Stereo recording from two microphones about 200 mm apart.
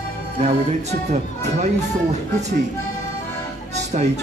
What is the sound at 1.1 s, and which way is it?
Speech, 35° right (ahead or behind).